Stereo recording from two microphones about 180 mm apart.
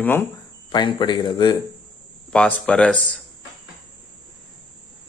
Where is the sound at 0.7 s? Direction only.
25° left (ahead or behind).